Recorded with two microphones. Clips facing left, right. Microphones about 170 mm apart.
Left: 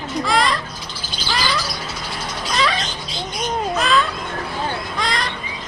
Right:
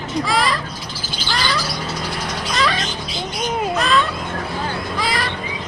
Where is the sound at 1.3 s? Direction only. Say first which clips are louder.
Even; centre (ahead or behind).